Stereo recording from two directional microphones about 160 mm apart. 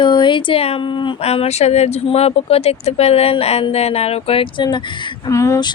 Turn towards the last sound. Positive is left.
turn(degrees=20)  # may be behind; listen again after turning